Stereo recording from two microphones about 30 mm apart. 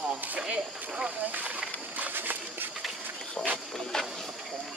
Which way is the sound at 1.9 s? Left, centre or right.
Right.